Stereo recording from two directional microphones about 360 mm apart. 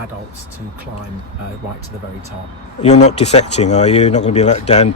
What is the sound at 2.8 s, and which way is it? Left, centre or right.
Speech, centre.